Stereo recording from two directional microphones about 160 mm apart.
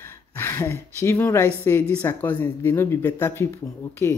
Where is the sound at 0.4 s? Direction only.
15° left (ahead or behind).